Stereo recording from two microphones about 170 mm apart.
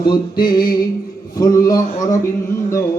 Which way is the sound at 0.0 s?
25° left (ahead or behind).